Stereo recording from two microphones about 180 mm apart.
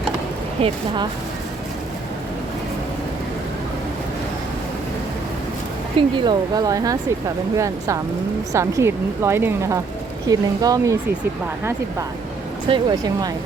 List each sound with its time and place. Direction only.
0.6 s speech: 35° right (ahead or behind)
6.0 s speech: 25° right (ahead or behind)
12.6 s speech: 25° right (ahead or behind)